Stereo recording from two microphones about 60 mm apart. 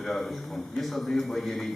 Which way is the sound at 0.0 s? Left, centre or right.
Centre.